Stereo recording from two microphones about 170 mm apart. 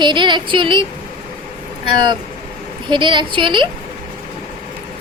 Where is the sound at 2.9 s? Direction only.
25° right (ahead or behind).